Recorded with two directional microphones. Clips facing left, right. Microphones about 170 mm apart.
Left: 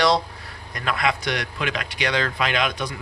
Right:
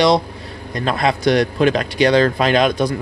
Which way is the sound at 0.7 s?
30° right (ahead or behind).